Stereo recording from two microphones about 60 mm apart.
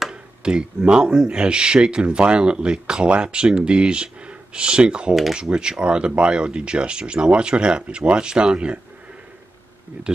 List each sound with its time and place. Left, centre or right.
0.1 s speech: centre
5.1 s speech: centre
5.4 s speech: centre
9.9 s speech: right